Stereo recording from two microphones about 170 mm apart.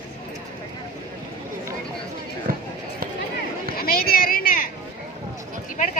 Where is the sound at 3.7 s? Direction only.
60° left (ahead or behind).